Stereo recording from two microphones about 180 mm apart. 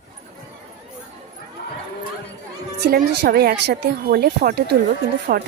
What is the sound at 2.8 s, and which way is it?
A woman's voice, 60° right (ahead or behind).